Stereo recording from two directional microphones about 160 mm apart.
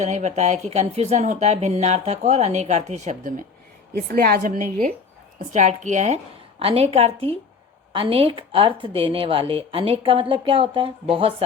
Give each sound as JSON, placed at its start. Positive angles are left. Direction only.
{"t": 0.0, "sound": "speech", "side_deg": -50}
{"t": 3.9, "sound": "a woman's voice", "side_deg": -70}
{"t": 6.6, "sound": "a woman's voice", "side_deg": -35}